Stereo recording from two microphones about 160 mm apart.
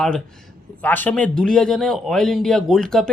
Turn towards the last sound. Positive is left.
turn(degrees=0)  # may be behind; listen again after turning